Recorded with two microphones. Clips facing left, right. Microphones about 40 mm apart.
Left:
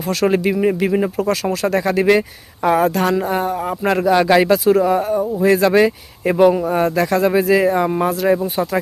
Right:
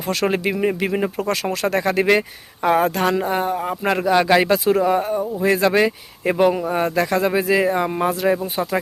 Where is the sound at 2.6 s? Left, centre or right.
Right.